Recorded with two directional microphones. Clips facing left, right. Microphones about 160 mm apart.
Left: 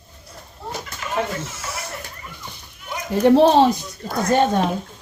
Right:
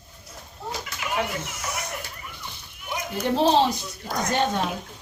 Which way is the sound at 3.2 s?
60° left (ahead or behind).